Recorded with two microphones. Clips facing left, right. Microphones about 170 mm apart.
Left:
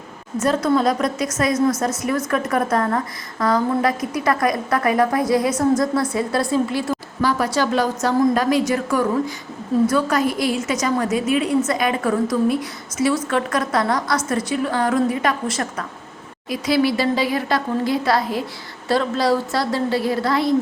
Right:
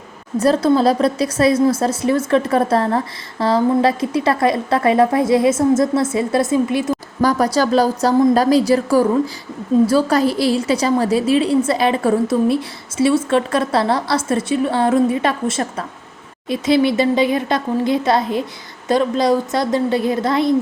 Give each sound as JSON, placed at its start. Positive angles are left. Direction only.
{"t": 0.3, "sound": "speech", "side_deg": -35}
{"t": 7.2, "sound": "a woman's voice", "side_deg": -40}